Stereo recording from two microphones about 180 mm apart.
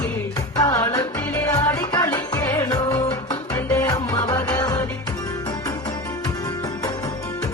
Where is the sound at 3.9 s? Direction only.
25° left (ahead or behind).